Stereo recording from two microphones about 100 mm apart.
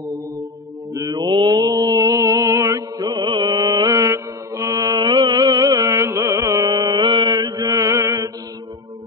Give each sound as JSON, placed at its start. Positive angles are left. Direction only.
{"t": 0.9, "sound": "mantra", "side_deg": -40}
{"t": 3.1, "sound": "mantra", "side_deg": -50}
{"t": 6.7, "sound": "mantra", "side_deg": -45}